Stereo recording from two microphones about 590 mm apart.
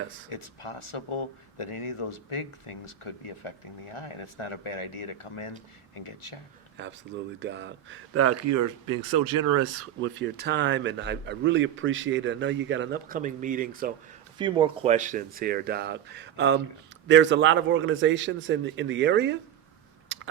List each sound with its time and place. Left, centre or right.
0.3 s speech: left
6.8 s speech: centre
20.1 s a sound: centre